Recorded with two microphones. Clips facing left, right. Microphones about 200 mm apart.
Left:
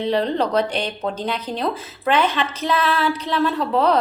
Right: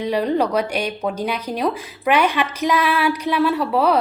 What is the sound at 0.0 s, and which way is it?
Speech, 10° right (ahead or behind).